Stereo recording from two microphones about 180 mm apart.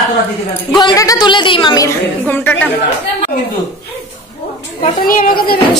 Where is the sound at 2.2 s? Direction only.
10° left (ahead or behind).